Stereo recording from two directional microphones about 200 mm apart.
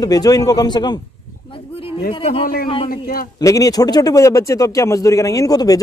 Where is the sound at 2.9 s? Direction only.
45° left (ahead or behind).